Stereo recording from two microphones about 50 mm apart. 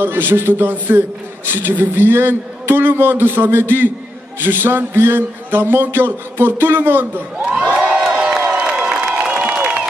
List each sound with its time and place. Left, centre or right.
0.0 s a man's voice: right
7.3 s crowd: right
9.2 s a sound: right